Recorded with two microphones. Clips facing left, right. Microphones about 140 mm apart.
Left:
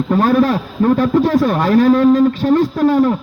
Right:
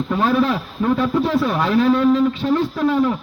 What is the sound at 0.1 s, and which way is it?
A man's voice, 45° left (ahead or behind).